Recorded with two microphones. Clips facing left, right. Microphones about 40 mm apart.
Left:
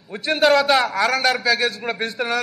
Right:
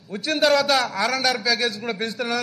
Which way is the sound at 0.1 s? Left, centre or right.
Centre.